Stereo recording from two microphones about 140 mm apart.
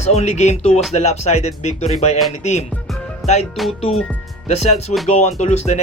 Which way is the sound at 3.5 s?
Centre (ahead or behind).